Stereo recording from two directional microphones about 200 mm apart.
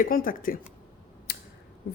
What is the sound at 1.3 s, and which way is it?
Scissors, 50° left (ahead or behind).